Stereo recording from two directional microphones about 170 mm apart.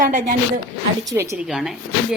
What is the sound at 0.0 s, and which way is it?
Speech, 50° right (ahead or behind).